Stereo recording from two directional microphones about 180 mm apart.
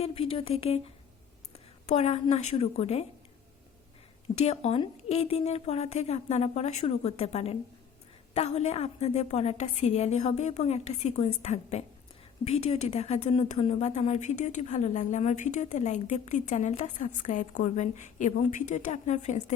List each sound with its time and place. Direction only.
0.0 s a woman's voice: 30° left (ahead or behind)
4.4 s a woman's voice: 35° left (ahead or behind)